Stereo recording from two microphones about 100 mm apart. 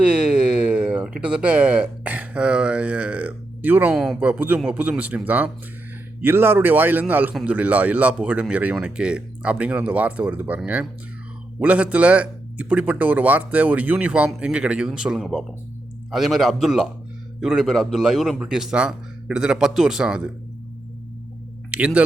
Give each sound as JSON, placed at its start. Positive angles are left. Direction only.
{"t": 0.0, "sound": "speech", "side_deg": -10}
{"t": 3.9, "sound": "a man's voice", "side_deg": 0}
{"t": 4.2, "sound": "a man's voice", "side_deg": -15}
{"t": 11.6, "sound": "a man's voice", "side_deg": -15}
{"t": 21.7, "sound": "speech", "side_deg": -10}